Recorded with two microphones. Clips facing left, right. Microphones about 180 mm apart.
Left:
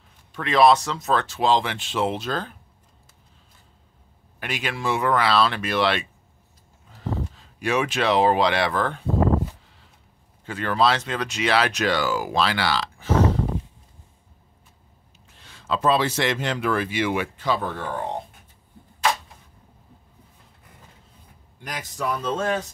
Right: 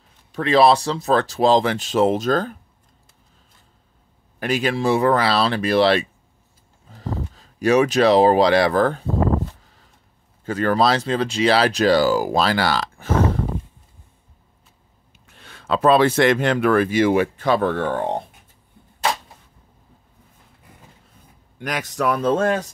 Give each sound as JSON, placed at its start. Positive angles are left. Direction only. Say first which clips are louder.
{"t": 0.3, "sound": "speech", "louder": "right 2 dB", "side_deg": -35}
{"t": 4.4, "sound": "speech", "louder": "right 8 dB", "side_deg": -40}
{"t": 10.4, "sound": "speech", "louder": "right 4 dB", "side_deg": -40}
{"t": 15.2, "sound": "speech", "louder": "right 3 dB", "side_deg": -60}
{"t": 17.5, "sound": "speech", "louder": "right 5 dB", "side_deg": -70}
{"t": 21.5, "sound": "speech", "louder": "right 7 dB", "side_deg": -70}